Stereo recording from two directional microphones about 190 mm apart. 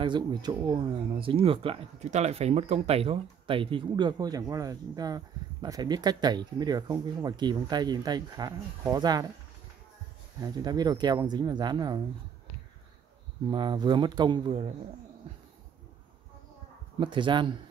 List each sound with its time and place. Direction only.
0.0 s speech: 25° right (ahead or behind)
10.4 s speech: 20° right (ahead or behind)
13.5 s speech: 25° right (ahead or behind)
17.0 s speech: 25° right (ahead or behind)